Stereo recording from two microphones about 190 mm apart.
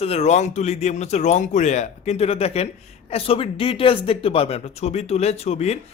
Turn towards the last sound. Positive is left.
turn(degrees=35)  # may be behind; listen again after turning